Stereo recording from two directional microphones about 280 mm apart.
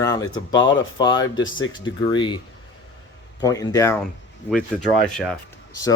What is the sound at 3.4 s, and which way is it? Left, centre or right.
Speech, centre.